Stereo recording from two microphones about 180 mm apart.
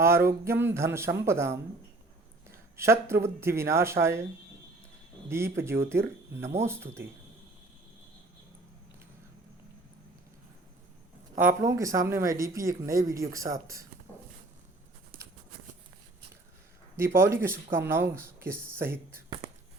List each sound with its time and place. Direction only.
0.0 s speech: 15° right (ahead or behind)
5.3 s speech: 15° right (ahead or behind)
11.3 s speech: 15° right (ahead or behind)
17.2 s speech: 15° right (ahead or behind)